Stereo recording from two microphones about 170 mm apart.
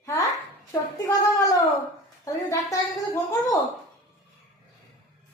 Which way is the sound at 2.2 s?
20° left (ahead or behind).